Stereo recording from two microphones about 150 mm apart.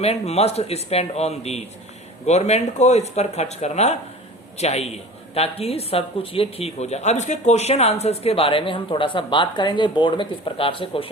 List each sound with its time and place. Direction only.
0.0 s a woman's voice: 45° left (ahead or behind)